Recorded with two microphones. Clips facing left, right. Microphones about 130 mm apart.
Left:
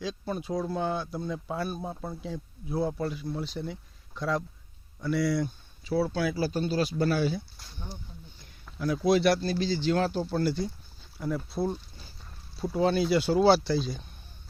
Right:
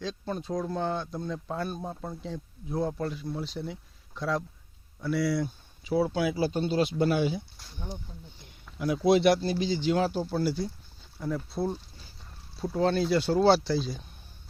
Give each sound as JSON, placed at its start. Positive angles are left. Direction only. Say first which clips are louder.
{"t": 0.0, "sound": "speech", "louder": "left 1 dB", "side_deg": 10}
{"t": 5.8, "sound": "speech", "louder": "right 1 dB", "side_deg": -15}
{"t": 8.4, "sound": "a sound", "louder": "even", "side_deg": -20}
{"t": 9.0, "sound": "speech", "louder": "right 2 dB", "side_deg": -20}